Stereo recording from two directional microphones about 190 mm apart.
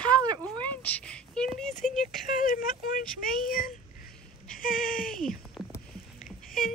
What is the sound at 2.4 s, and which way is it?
Speech, 45° left (ahead or behind).